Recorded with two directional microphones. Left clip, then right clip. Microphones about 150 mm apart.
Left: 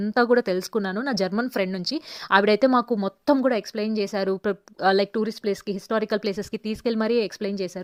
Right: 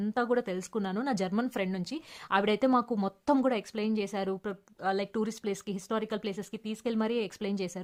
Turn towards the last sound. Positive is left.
turn(degrees=30)  # may be behind; listen again after turning